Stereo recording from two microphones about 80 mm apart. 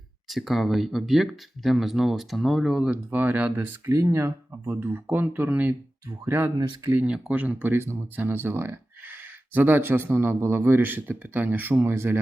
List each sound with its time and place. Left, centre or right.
0.3 s speech: centre
2.9 s speech: right
3.8 s speech: right
7.1 s speech: centre